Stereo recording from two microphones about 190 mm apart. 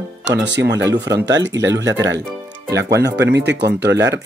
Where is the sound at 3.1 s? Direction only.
65° right (ahead or behind).